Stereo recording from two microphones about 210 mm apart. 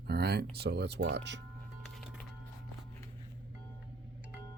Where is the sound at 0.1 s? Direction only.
50° right (ahead or behind).